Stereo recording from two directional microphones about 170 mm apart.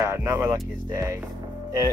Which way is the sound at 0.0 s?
15° right (ahead or behind).